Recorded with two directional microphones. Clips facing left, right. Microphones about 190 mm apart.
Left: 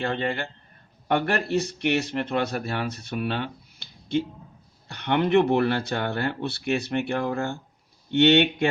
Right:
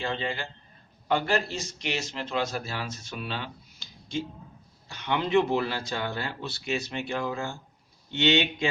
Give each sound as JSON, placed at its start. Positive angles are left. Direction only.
{"t": 0.0, "sound": "speech", "side_deg": 60}